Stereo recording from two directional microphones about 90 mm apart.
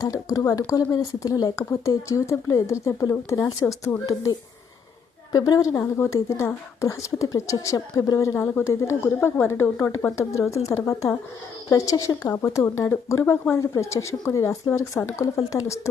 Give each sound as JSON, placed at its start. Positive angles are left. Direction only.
{"t": 0.0, "sound": "speech", "side_deg": 40}
{"t": 1.5, "sound": "speech", "side_deg": 30}